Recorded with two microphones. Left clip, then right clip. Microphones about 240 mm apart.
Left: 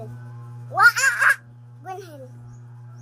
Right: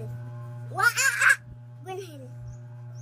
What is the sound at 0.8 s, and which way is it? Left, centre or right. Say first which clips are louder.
Speech: left 7 dB; centre.